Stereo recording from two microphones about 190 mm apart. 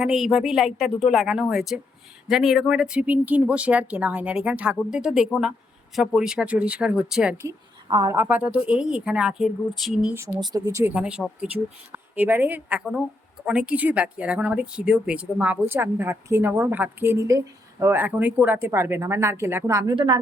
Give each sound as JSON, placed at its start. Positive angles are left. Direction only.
{"t": 0.0, "sound": "speech", "side_deg": -5}
{"t": 7.4, "sound": "a woman's voice", "side_deg": -20}
{"t": 8.1, "sound": "speech", "side_deg": -10}
{"t": 10.2, "sound": "speech", "side_deg": -15}